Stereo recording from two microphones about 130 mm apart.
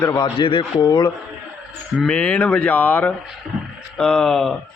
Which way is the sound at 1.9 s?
5° left (ahead or behind).